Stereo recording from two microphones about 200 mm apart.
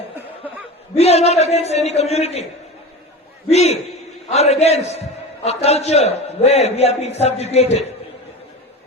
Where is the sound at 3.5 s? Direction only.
30° left (ahead or behind).